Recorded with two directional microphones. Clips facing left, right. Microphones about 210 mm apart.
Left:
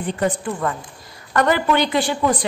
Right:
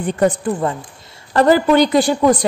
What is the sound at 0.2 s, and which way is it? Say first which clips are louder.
A woman's voice: right 6 dB; 30° right (ahead or behind).